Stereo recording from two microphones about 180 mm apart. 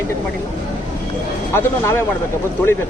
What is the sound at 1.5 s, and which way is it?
Speech, 15° left (ahead or behind).